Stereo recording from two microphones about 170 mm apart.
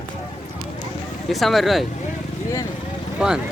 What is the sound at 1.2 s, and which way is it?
Speech, centre (ahead or behind).